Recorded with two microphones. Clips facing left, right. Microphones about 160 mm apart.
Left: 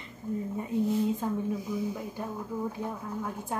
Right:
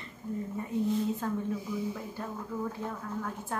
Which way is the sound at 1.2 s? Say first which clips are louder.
Left 2 dB; 15° left (ahead or behind).